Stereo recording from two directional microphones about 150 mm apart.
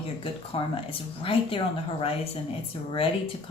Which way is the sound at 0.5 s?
35° left (ahead or behind).